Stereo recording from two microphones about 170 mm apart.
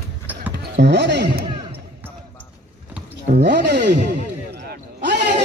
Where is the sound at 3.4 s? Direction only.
80° right.